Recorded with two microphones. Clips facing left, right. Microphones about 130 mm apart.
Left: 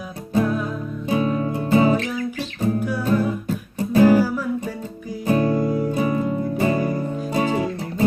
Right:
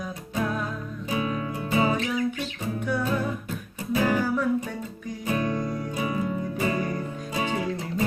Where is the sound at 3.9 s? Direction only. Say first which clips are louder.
Left 9 dB; 35° left (ahead or behind).